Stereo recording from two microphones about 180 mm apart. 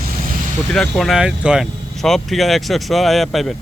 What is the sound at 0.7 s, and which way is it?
Speech, centre (ahead or behind).